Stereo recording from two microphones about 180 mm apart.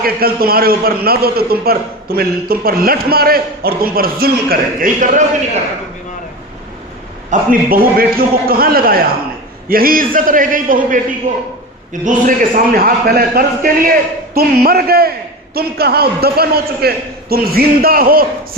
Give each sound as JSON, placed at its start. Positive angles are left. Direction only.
{"t": 0.0, "sound": "a man's voice", "side_deg": -55}
{"t": 7.3, "sound": "a man's voice", "side_deg": -55}